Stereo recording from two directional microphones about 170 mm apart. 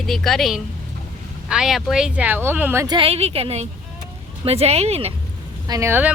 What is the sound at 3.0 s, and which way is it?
A woman's voice, 35° right (ahead or behind).